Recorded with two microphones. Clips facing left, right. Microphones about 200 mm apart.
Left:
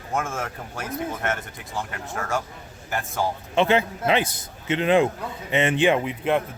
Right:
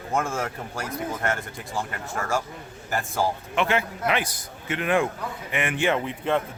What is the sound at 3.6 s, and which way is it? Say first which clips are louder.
A man's voice: left 5 dB; 25° left (ahead or behind).